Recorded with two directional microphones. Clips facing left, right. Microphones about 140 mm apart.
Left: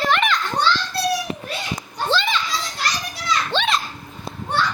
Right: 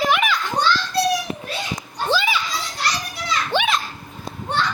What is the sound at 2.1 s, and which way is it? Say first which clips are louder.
Children playing: right 1 dB; 10° right (ahead or behind).